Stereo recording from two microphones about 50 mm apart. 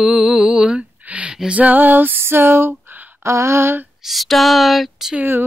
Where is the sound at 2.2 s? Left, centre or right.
Right.